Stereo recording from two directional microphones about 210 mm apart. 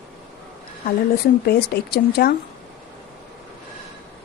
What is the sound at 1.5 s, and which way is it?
Speech, 50° left (ahead or behind).